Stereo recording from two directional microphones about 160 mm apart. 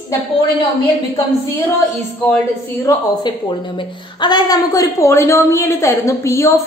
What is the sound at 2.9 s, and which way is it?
Speech, 20° left (ahead or behind).